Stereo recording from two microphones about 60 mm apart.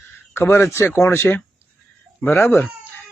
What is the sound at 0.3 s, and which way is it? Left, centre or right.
A man's voice, left.